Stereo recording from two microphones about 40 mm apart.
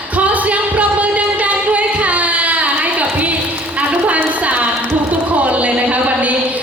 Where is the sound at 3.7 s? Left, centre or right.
Right.